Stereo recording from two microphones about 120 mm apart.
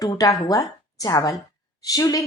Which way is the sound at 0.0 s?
30° left (ahead or behind).